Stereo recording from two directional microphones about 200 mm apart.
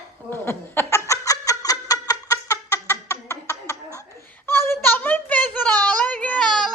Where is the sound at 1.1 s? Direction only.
15° left (ahead or behind); by 6.7 s centre (ahead or behind).